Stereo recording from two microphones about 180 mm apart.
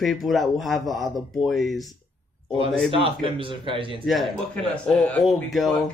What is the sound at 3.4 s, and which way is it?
Speech, 30° right (ahead or behind).